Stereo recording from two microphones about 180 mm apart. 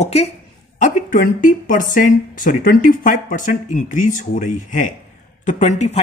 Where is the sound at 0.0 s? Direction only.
35° left (ahead or behind).